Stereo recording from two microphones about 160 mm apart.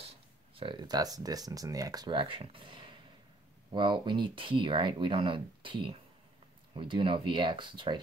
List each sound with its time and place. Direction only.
0.6 s speech: 30° right (ahead or behind)